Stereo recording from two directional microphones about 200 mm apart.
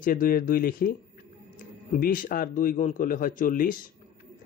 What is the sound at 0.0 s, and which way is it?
Speech, 45° left (ahead or behind).